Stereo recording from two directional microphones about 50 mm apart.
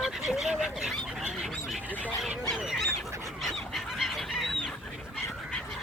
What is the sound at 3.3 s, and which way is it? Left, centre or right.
Goose, centre.